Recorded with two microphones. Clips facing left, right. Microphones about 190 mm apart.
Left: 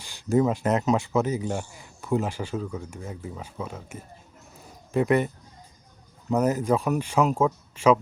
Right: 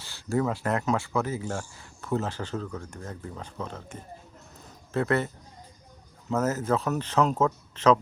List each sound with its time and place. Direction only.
0.0 s speech: 15° left (ahead or behind)
6.3 s speech: 15° left (ahead or behind)